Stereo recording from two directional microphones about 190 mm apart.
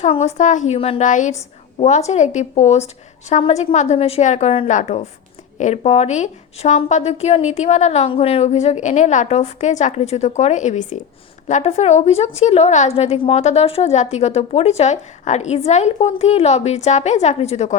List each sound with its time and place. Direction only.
0.0 s a woman's voice: 35° left (ahead or behind)